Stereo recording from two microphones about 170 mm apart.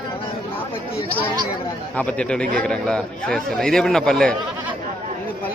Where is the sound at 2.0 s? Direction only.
5° left (ahead or behind).